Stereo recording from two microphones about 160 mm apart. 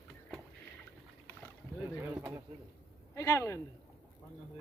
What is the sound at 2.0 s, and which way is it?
Speech, 15° right (ahead or behind).